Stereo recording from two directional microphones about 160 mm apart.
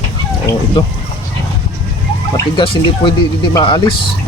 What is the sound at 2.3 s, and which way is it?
Speech, 35° left (ahead or behind).